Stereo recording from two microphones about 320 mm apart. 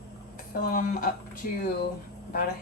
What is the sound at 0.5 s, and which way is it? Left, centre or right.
Speech, left.